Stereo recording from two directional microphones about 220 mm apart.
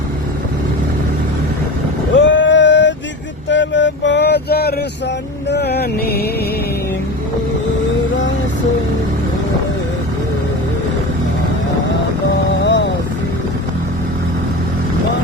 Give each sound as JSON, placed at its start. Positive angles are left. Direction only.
{"t": 2.1, "sound": "vehicle", "side_deg": 55}
{"t": 3.5, "sound": "music", "side_deg": 55}
{"t": 12.6, "sound": "vehicle", "side_deg": 55}